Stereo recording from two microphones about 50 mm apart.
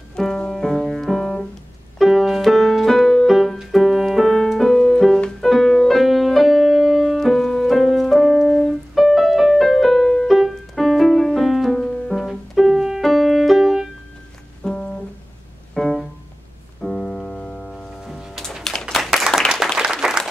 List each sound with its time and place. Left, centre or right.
0.2 s music: centre
14.6 s music: centre
15.7 s music: centre
18.6 s a sound: centre
19.8 s applause: centre